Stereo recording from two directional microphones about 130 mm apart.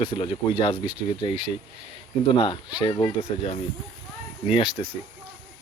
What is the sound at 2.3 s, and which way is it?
Speech, 40° left (ahead or behind).